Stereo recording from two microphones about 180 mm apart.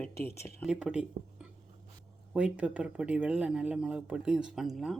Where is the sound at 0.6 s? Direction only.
5° right (ahead or behind).